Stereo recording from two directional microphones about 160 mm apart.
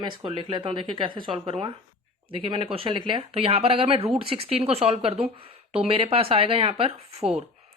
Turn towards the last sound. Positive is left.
turn(degrees=-35)  # may be behind; listen again after turning